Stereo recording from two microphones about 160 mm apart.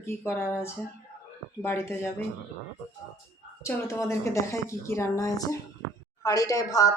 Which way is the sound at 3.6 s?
15° left (ahead or behind).